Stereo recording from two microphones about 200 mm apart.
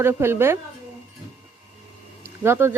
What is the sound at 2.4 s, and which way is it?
Speech, 10° right (ahead or behind).